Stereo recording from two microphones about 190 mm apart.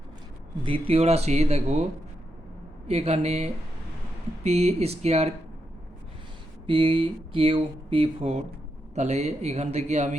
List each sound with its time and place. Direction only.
0.6 s speech: 30° right (ahead or behind)
2.8 s speech: 35° right (ahead or behind)
6.7 s speech: 30° right (ahead or behind)